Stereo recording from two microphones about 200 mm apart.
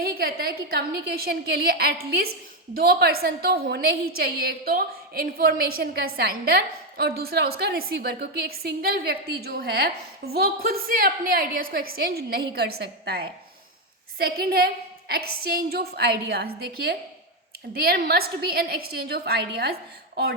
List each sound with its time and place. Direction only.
0.0 s a woman's voice: 50° right (ahead or behind)